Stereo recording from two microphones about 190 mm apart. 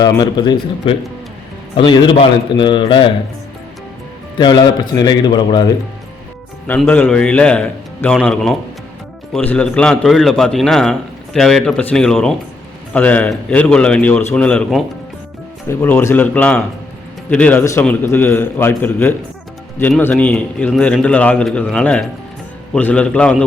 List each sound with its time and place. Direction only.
0.0 s speech: 20° left (ahead or behind)
4.4 s speech: 25° left (ahead or behind)
6.7 s a man's voice: 10° left (ahead or behind)